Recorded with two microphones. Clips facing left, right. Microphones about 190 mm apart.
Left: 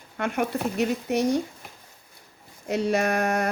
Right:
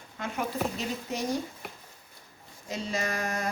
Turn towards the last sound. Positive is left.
turn(degrees=65)  # may be behind; listen again after turning